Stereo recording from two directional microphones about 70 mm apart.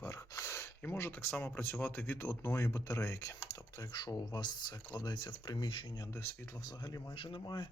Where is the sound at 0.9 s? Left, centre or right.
Left.